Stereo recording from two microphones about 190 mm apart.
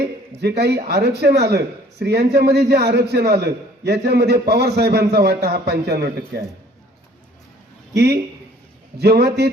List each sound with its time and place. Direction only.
0.0 s speech: 60° right (ahead or behind)
7.9 s speech: 60° right (ahead or behind)